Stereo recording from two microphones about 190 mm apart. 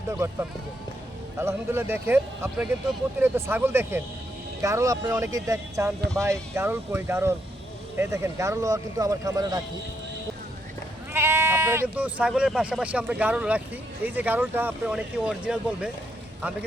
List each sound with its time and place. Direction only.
0.1 s speech: 15° right (ahead or behind)
11.1 s speech: 15° right (ahead or behind)